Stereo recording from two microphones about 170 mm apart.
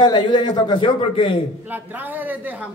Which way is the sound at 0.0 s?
25° left (ahead or behind).